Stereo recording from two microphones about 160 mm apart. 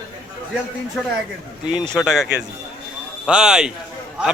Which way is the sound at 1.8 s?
30° left (ahead or behind).